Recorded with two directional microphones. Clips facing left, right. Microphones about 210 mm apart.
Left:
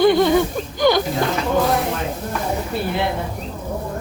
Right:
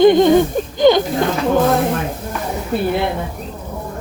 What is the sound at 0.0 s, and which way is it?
Speech, 20° right (ahead or behind).